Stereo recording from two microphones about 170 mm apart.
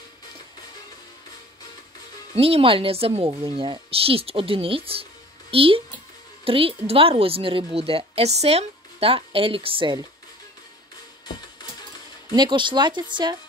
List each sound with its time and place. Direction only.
2.3 s a woman's voice: 35° right (ahead or behind)
12.4 s speech: 25° right (ahead or behind)